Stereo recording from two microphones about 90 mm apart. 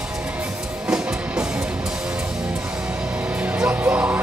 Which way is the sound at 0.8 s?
10° right (ahead or behind).